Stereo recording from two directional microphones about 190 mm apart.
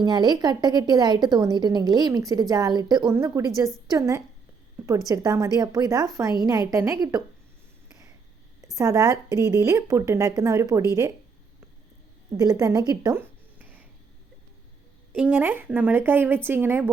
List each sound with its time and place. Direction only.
0.0 s a woman's voice: 20° right (ahead or behind)
8.7 s speech: 15° right (ahead or behind)
12.4 s a woman's voice: 20° right (ahead or behind)
12.9 s a sound: 15° right (ahead or behind)
15.1 s speech: 10° right (ahead or behind)